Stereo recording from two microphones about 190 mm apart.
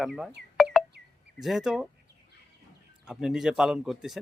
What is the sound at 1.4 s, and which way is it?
Speech, centre (ahead or behind).